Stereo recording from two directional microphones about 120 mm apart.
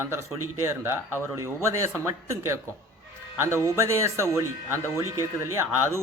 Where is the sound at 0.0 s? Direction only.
20° right (ahead or behind).